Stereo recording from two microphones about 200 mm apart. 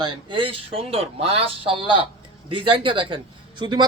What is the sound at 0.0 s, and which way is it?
Speech, 25° right (ahead or behind).